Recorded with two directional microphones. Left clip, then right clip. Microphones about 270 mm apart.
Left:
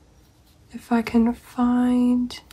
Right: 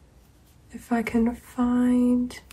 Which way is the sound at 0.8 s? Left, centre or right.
Centre.